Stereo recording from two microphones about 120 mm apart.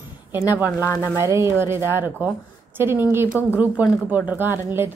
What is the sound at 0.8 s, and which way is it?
Speech, 25° left (ahead or behind).